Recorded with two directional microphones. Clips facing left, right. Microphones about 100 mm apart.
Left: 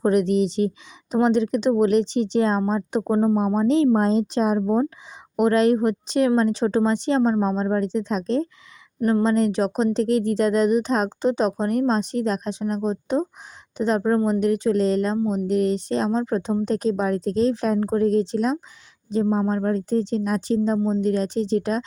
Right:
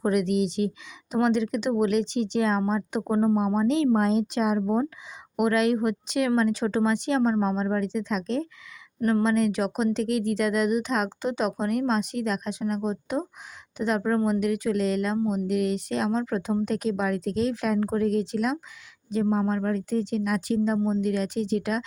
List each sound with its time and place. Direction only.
0.0 s speech: 35° left (ahead or behind)
9.0 s speech: 20° left (ahead or behind)
9.2 s a woman's voice: 35° left (ahead or behind)